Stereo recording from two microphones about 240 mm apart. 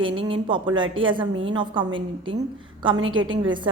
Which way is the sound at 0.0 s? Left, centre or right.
Right.